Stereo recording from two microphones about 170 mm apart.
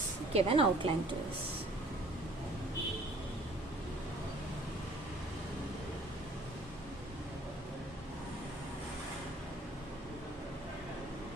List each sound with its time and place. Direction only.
0.3 s a woman's voice: 30° right (ahead or behind)